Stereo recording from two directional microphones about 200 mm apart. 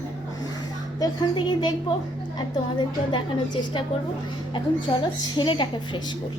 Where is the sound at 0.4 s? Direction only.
20° left (ahead or behind).